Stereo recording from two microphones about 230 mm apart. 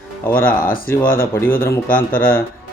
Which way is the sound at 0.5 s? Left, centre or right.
Left.